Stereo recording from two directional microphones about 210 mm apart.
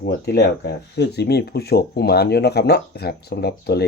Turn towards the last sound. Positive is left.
turn(degrees=50)  # may be behind; listen again after turning